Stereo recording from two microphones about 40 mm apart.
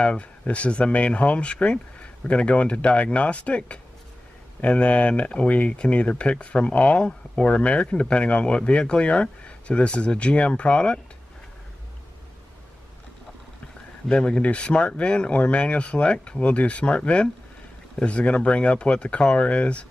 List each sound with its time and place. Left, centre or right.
0.0 s speech: left
14.0 s speech: left